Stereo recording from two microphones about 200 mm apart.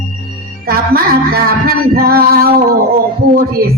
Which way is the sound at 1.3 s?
50° right (ahead or behind).